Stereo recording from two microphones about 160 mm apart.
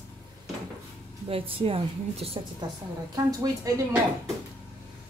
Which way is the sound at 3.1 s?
20° right (ahead or behind).